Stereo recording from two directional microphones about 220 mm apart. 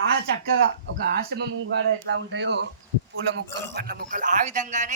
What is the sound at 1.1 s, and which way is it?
Speech, 45° right (ahead or behind).